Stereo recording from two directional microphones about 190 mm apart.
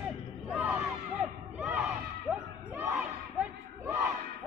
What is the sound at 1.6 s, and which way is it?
Crowd, 5° right (ahead or behind).